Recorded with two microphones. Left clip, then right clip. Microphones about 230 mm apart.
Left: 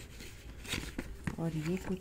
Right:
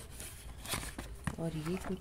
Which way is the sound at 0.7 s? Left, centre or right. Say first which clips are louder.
Left 1 dB; centre.